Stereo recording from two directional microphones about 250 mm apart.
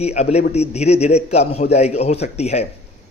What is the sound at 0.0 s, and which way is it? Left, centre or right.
A man's voice, left.